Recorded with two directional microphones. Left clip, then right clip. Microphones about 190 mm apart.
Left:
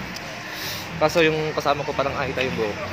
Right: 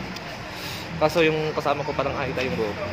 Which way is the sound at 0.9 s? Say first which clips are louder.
Left 1 dB; 15° left (ahead or behind).